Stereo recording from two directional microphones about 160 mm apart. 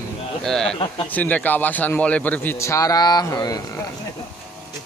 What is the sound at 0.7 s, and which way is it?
Speech, 30° left (ahead or behind).